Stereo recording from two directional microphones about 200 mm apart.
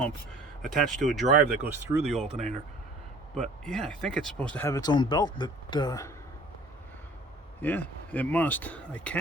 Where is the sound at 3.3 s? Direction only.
5° left (ahead or behind); by 6.1 s 20° left (ahead or behind).